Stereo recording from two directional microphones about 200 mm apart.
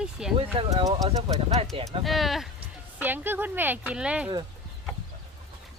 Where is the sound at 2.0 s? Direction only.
Centre (ahead or behind).